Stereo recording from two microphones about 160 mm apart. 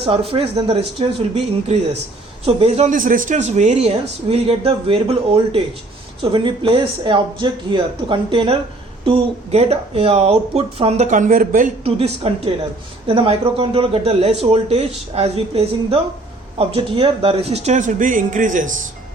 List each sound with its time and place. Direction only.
0.0 s speech: 35° right (ahead or behind); by 11.7 s 60° right (ahead or behind)
11.8 s a man's voice: 40° right (ahead or behind)